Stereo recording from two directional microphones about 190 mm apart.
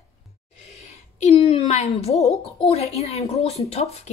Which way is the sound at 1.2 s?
35° left (ahead or behind).